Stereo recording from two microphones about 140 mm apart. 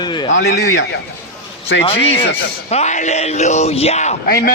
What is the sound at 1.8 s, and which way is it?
Speech, 45° left (ahead or behind).